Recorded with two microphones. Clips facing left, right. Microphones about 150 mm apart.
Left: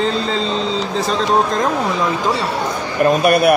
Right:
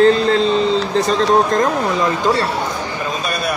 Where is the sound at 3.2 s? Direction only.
65° left (ahead or behind).